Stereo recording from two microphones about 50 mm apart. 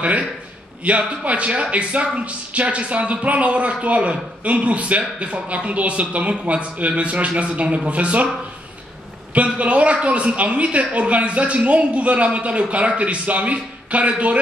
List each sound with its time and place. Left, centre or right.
0.8 s speech: right
9.3 s speech: right